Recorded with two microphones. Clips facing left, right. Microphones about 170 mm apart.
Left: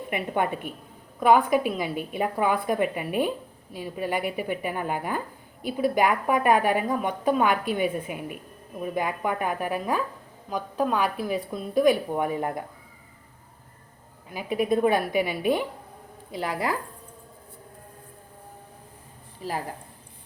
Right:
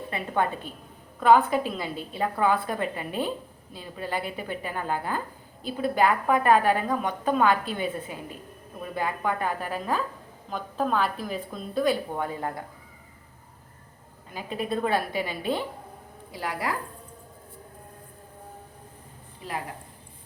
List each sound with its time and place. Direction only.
0.1 s a woman's voice: 15° left (ahead or behind)
14.3 s a woman's voice: 15° left (ahead or behind)
19.4 s a woman's voice: 40° left (ahead or behind)